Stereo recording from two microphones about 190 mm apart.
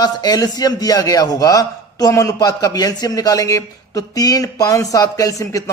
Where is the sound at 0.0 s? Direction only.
20° left (ahead or behind).